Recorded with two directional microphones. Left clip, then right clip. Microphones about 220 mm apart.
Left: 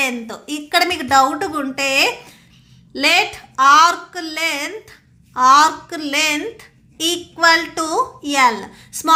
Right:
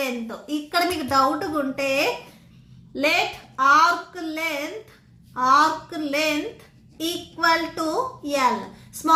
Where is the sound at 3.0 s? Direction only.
50° left (ahead or behind).